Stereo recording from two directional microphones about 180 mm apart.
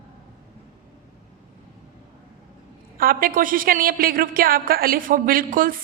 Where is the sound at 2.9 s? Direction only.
50° right (ahead or behind).